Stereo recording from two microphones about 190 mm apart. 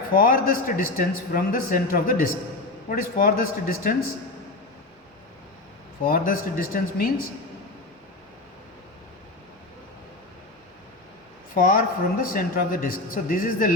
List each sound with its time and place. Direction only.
0.1 s speech: 50° left (ahead or behind)
6.1 s speech: 50° left (ahead or behind)
11.5 s speech: 50° left (ahead or behind)